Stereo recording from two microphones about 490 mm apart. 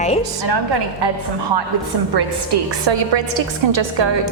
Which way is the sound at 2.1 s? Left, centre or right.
Right.